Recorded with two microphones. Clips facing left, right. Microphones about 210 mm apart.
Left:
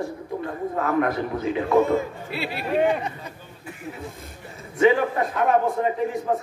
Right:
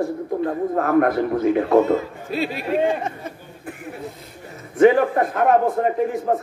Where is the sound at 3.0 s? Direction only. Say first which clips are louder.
Right 4 dB; 45° right (ahead or behind).